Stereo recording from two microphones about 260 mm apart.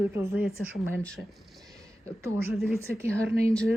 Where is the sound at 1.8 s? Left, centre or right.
Centre.